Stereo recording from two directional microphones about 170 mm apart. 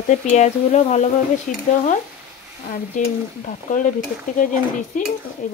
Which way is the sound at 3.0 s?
45° left (ahead or behind).